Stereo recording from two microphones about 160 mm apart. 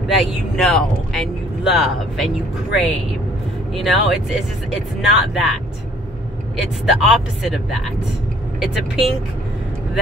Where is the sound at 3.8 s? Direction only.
Centre (ahead or behind).